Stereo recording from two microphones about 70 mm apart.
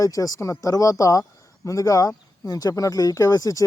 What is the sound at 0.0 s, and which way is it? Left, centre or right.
Speech, left.